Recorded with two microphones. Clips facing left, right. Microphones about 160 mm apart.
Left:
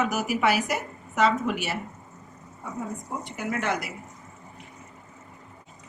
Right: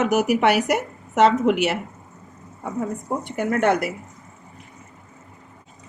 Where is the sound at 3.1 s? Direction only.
60° right (ahead or behind).